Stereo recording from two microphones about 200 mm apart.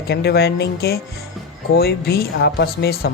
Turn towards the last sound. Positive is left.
turn(degrees=50)  # may be behind; listen again after turning